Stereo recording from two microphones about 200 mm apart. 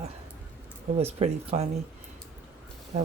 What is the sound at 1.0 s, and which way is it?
Speech, 30° right (ahead or behind).